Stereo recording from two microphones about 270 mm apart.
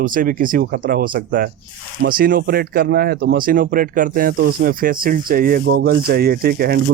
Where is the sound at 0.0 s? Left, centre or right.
Right.